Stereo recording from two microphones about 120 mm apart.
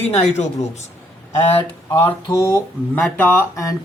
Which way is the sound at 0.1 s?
60° left (ahead or behind).